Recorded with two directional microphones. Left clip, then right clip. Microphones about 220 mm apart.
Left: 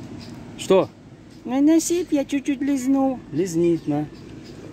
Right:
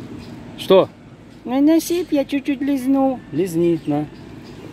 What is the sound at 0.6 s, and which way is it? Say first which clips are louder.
Speech: right 5 dB; centre (ahead or behind).